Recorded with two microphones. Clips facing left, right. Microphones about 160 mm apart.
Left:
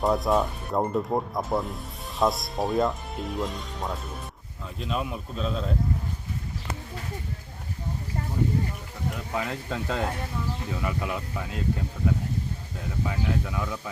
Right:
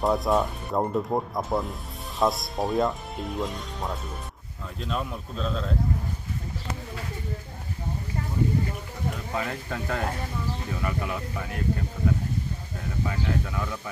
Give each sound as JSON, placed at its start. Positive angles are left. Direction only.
{"t": 0.0, "sound": "speech", "side_deg": 0}
{"t": 9.3, "sound": "speech", "side_deg": 15}
{"t": 13.1, "sound": "speech", "side_deg": 15}